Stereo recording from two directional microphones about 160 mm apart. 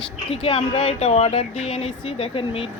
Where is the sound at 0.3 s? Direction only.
35° left (ahead or behind).